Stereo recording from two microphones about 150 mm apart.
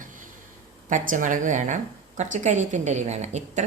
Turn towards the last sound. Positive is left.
turn(degrees=-50)  # may be behind; listen again after turning